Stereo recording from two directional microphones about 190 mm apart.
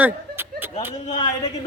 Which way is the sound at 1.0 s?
35° left (ahead or behind).